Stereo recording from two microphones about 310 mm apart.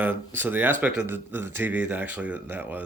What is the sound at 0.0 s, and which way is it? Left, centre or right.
Speech, centre.